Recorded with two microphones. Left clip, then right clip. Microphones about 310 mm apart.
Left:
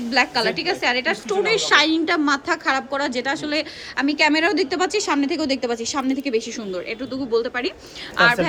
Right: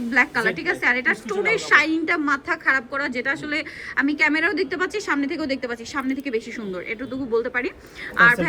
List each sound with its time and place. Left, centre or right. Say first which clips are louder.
0.1 s a woman's voice: even; centre